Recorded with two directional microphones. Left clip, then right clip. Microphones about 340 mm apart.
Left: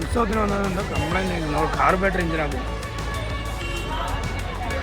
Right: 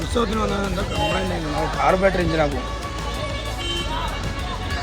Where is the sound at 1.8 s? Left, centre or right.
Centre.